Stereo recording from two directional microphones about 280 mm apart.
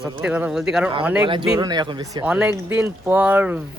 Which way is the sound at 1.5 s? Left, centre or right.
Centre.